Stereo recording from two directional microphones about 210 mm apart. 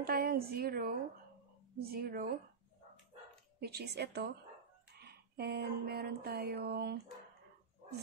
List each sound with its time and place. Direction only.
0.0 s a woman's voice: 45° right (ahead or behind)
3.5 s speech: 50° right (ahead or behind)
4.9 s a sound: 50° right (ahead or behind)